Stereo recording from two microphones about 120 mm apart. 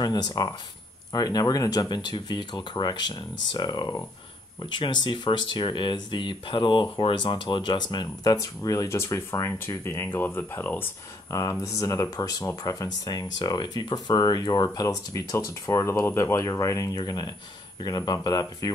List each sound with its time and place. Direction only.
0.0 s speech: 35° left (ahead or behind); by 10.9 s 15° left (ahead or behind)
11.2 s speech: 25° left (ahead or behind)